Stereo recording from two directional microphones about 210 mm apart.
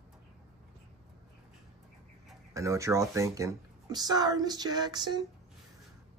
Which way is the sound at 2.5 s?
15° right (ahead or behind).